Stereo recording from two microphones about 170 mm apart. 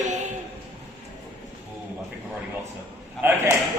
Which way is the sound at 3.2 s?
10° right (ahead or behind).